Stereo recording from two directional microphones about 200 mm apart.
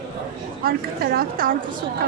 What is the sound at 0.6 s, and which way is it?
Speech, 50° right (ahead or behind).